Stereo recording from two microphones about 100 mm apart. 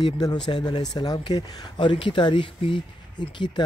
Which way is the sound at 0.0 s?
45° left (ahead or behind).